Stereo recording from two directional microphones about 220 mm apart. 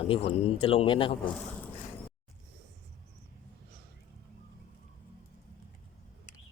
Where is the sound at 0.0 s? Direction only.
25° left (ahead or behind).